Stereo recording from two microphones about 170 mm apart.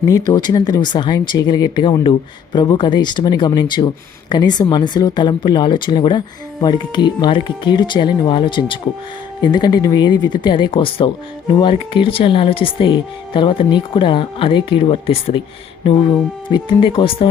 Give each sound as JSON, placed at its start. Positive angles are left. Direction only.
{"t": 0.1, "sound": "speech", "side_deg": 25}